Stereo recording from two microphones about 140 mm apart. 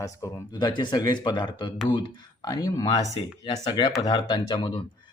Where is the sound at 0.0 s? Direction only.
25° left (ahead or behind).